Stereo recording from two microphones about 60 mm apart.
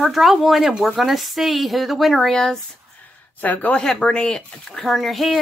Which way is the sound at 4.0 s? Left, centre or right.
Centre.